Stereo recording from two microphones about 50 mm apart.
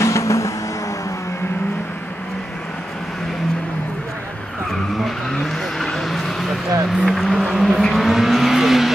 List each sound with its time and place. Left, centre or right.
0.0 s vehicle: left
5.0 s vehicle: centre
6.0 s a sound: centre
6.9 s vehicle: centre